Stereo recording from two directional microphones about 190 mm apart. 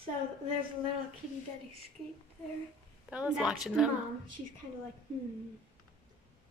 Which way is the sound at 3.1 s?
5° right (ahead or behind).